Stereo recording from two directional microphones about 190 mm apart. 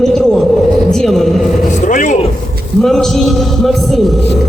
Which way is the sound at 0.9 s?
Centre (ahead or behind).